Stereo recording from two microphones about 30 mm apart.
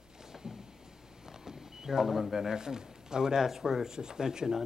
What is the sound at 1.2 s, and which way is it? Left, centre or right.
Speech, centre.